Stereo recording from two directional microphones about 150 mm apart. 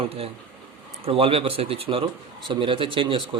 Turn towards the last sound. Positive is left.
turn(degrees=-35)  # may be behind; listen again after turning